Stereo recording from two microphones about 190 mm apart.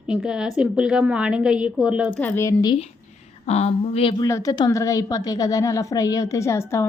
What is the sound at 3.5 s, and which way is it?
Speech, 35° left (ahead or behind).